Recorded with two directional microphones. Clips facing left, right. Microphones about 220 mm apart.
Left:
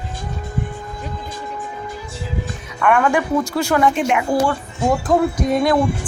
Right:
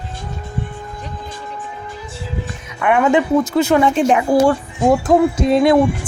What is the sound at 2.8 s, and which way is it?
A woman's voice, 20° right (ahead or behind).